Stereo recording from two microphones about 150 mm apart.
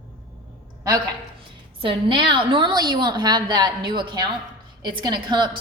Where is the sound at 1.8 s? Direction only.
35° right (ahead or behind).